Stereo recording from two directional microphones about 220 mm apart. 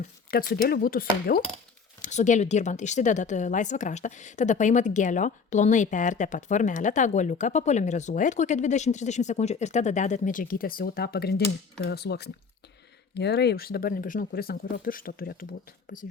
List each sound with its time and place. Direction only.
0.3 s speech: 40° left (ahead or behind)